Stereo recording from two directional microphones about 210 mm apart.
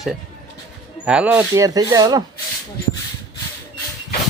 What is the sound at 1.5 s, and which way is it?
Speech, 15° right (ahead or behind).